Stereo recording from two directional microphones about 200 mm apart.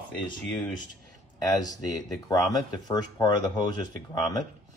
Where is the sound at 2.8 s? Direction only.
20° left (ahead or behind).